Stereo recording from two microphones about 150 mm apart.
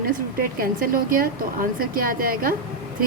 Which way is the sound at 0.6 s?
70° right (ahead or behind).